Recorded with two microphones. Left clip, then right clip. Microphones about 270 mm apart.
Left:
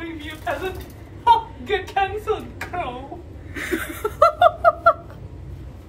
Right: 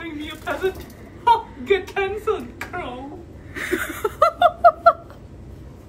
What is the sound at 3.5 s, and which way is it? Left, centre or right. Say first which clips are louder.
Chuckle: right 1 dB; centre.